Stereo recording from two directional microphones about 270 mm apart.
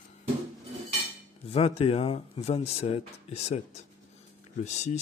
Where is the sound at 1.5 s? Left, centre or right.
Left.